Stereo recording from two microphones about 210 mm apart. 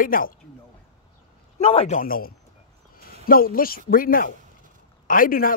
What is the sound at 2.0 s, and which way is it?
Speech, 45° left (ahead or behind).